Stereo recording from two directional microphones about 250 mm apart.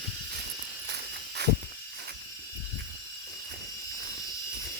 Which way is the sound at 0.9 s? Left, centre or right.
Right.